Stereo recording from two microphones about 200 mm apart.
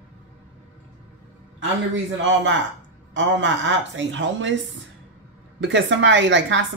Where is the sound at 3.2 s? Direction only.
70° right (ahead or behind).